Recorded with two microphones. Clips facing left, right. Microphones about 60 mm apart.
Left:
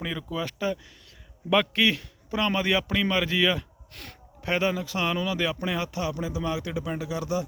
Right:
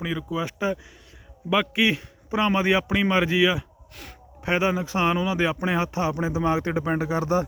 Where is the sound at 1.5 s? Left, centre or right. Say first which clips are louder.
Right 1 dB; centre.